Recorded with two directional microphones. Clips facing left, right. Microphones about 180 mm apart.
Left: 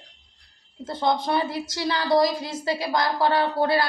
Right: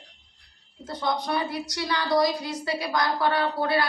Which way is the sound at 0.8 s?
25° left (ahead or behind).